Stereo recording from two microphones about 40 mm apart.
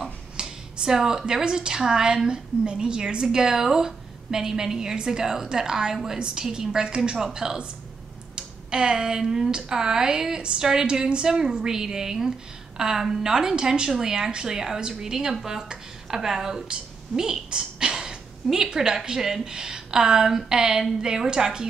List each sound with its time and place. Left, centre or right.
0.4 s a woman's voice: centre